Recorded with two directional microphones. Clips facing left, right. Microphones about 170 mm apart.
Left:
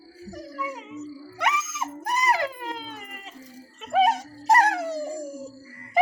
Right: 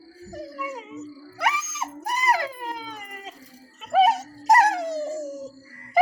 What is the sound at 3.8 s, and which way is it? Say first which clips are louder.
Music: right 2 dB; centre (ahead or behind).